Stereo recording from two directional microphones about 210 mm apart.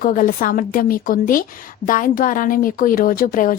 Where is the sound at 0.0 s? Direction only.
40° left (ahead or behind).